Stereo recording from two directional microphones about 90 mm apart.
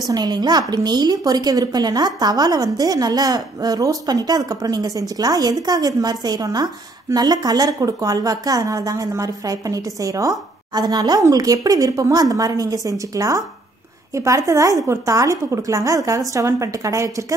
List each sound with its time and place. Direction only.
0.1 s a woman's voice: 50° right (ahead or behind); by 17.1 s 35° right (ahead or behind)